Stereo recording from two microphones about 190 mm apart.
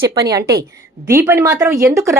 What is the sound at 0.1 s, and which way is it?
A woman's voice, 20° right (ahead or behind).